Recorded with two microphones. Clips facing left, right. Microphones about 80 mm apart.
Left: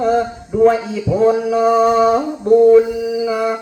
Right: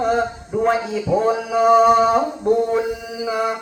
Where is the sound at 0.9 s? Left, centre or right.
Right.